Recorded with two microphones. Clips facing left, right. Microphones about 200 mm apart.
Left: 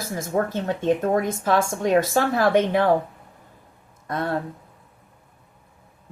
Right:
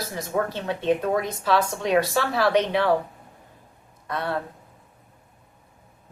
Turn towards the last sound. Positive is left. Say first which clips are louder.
# left 3 dB
turn(degrees=45)  # may be behind; listen again after turning